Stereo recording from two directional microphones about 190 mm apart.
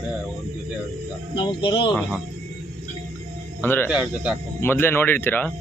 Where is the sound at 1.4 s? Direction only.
25° left (ahead or behind).